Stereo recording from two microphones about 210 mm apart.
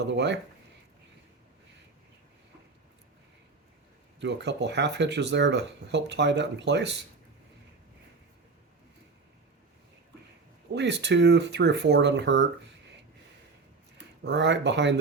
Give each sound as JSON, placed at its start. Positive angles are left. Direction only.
{"t": 0.1, "sound": "speech", "side_deg": -55}
{"t": 4.2, "sound": "speech", "side_deg": -55}
{"t": 10.8, "sound": "speech", "side_deg": -55}
{"t": 14.3, "sound": "speech", "side_deg": -55}